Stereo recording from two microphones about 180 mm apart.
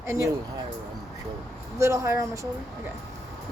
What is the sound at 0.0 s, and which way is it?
Speech, 15° right (ahead or behind).